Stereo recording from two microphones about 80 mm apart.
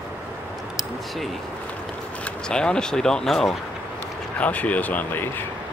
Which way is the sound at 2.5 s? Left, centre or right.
Centre.